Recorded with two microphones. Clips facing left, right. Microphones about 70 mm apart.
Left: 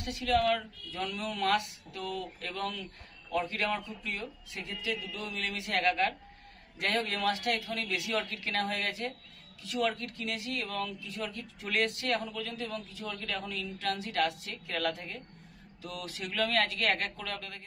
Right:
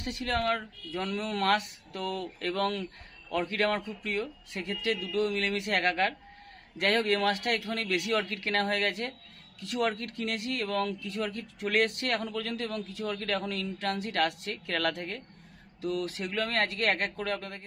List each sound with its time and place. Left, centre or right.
0.0 s a man's voice: right
9.6 s a man's voice: right
13.5 s speech: right
15.8 s speech: right